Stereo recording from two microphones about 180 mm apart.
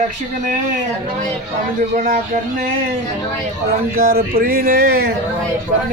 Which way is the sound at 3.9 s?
60° right (ahead or behind).